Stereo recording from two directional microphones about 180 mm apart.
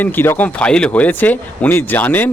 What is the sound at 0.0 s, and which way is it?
Speech, 10° left (ahead or behind).